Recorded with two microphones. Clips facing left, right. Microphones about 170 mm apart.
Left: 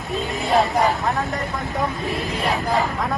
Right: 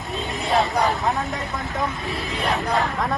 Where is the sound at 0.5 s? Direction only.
Centre (ahead or behind).